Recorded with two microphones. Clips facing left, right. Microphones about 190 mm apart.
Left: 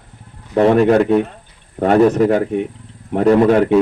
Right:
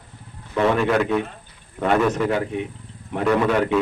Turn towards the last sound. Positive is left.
turn(degrees=40)  # may be behind; listen again after turning